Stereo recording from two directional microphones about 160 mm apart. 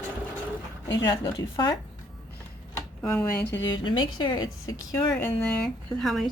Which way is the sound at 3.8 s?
30° left (ahead or behind).